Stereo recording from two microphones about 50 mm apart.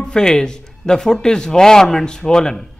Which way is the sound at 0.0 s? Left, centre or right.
Centre.